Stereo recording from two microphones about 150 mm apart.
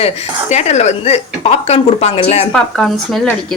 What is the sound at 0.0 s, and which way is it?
A woman's voice, 45° left (ahead or behind).